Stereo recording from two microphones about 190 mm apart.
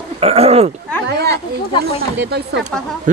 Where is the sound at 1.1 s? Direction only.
60° right (ahead or behind).